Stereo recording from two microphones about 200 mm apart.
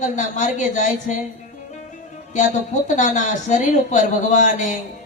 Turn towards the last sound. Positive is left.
turn(degrees=40)  # may be behind; listen again after turning